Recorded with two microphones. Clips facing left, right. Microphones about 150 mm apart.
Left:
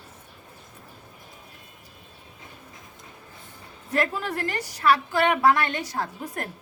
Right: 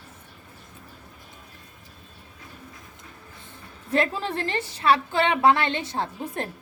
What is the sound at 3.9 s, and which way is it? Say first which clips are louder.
A woman's voice: right 2 dB; 25° right (ahead or behind).